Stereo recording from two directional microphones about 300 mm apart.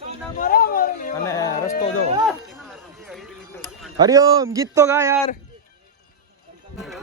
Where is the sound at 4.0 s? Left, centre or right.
Centre.